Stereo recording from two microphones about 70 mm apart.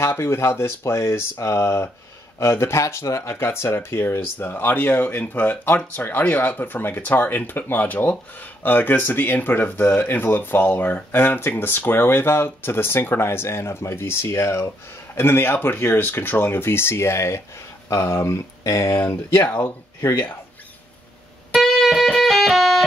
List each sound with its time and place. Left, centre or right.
0.0 s speech: left
18.6 s speech: left
18.9 s speech: left
21.5 s music: centre